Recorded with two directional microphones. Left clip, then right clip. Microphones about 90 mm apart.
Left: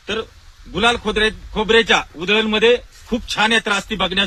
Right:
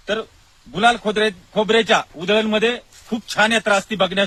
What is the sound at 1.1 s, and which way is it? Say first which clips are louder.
A man's voice: left 1 dB; 45° right (ahead or behind).